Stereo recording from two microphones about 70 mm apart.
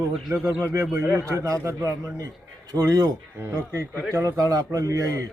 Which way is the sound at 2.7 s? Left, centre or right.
Right.